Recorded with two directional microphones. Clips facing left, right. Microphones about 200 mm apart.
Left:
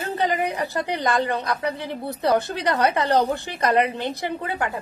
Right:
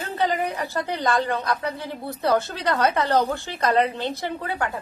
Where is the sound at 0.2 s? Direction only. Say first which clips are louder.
Even; 15° left (ahead or behind).